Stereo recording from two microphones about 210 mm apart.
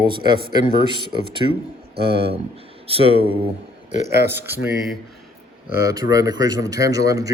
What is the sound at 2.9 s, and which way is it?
Speech, 25° right (ahead or behind).